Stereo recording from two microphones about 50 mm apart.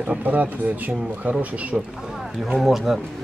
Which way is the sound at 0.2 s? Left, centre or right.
Right.